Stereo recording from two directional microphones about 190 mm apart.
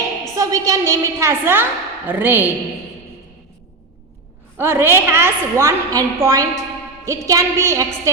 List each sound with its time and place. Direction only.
0.3 s a woman's voice: 15° right (ahead or behind)
4.5 s a woman's voice: 10° right (ahead or behind)